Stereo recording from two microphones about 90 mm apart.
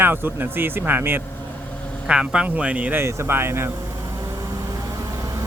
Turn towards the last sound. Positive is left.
turn(degrees=-25)  # may be behind; listen again after turning